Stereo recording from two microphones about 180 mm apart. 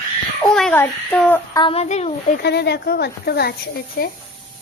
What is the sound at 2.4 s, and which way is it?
Speech, 65° left (ahead or behind).